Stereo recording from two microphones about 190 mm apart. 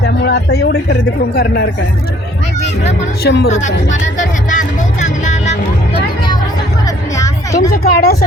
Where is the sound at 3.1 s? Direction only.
60° left (ahead or behind).